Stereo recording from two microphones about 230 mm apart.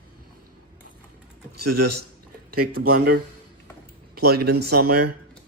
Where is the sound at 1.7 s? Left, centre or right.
Right.